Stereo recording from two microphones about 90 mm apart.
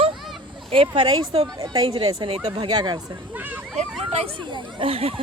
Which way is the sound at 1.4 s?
50° right (ahead or behind).